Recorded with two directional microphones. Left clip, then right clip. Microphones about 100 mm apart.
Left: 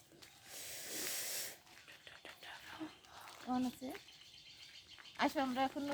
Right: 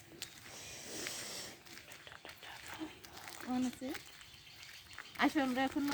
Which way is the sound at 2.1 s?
45° left (ahead or behind).